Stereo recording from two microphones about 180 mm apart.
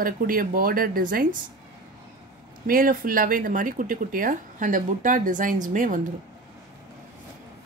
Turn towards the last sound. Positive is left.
turn(degrees=-45)  # may be behind; listen again after turning